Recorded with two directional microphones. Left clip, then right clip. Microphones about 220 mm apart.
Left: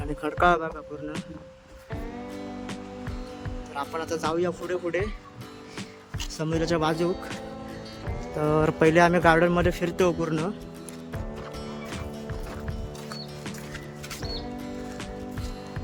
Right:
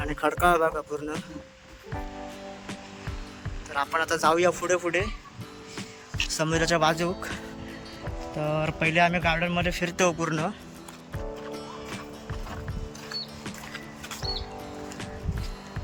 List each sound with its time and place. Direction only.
0.0 s a sound: centre (ahead or behind)
0.3 s speech: centre (ahead or behind)
3.8 s speech: 5° left (ahead or behind)
4.9 s speech: 5° left (ahead or behind)
6.3 s speech: 5° left (ahead or behind)
8.4 s speech: 20° left (ahead or behind)